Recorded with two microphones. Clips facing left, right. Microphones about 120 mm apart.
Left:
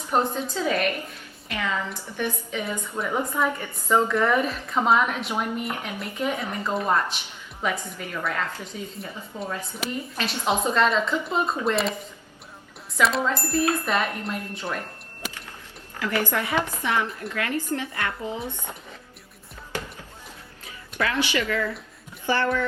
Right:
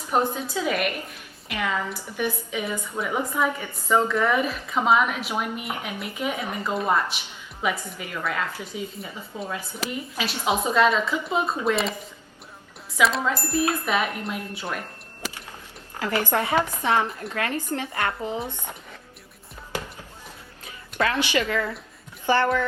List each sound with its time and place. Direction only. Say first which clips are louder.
0.1 s a woman's voice: even; 5° right (ahead or behind)
13.0 s speech: even; centre (ahead or behind)
16.0 s a woman's voice: right 1 dB; 25° right (ahead or behind)
20.7 s speech: right 2 dB; 30° right (ahead or behind)